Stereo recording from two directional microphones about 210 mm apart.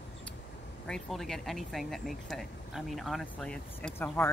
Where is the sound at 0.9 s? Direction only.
Centre (ahead or behind).